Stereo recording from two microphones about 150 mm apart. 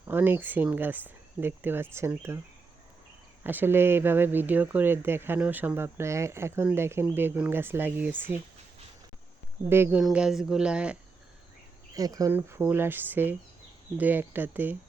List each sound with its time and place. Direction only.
0.1 s speech: 15° right (ahead or behind)
3.4 s speech: 15° right (ahead or behind)
9.6 s speech: 15° right (ahead or behind)
10.0 s speech: 5° right (ahead or behind)
11.9 s speech: 25° right (ahead or behind)